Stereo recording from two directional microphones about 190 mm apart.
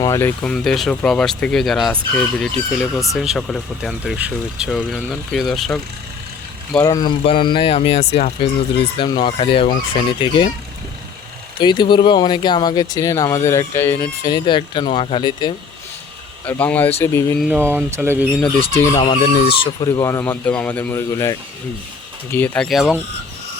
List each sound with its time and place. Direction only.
0.0 s speech: 15° left (ahead or behind)
6.8 s fowl: 20° left (ahead or behind)
11.6 s fowl: 25° left (ahead or behind)
14.0 s fowl: 25° left (ahead or behind)
16.5 s speech: 10° left (ahead or behind)
17.4 s speech: 10° right (ahead or behind)
18.7 s speech: 15° left (ahead or behind)
18.9 s speech: 30° left (ahead or behind)
19.6 s speech: 20° left (ahead or behind); by 23.0 s centre (ahead or behind)